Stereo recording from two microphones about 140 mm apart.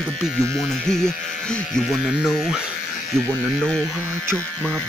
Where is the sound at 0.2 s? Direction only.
Centre (ahead or behind).